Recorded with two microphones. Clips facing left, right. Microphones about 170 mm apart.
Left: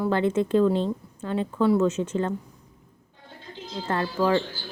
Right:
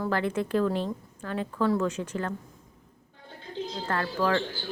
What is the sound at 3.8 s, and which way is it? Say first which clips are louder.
Speech: left 4 dB; 25° left (ahead or behind).